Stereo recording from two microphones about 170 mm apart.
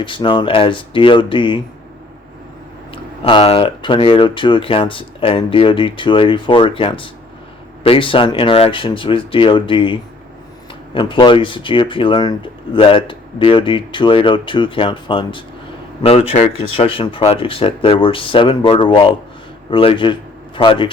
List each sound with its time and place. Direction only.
0.0 s speech: 30° left (ahead or behind)
2.9 s speech: 30° left (ahead or behind)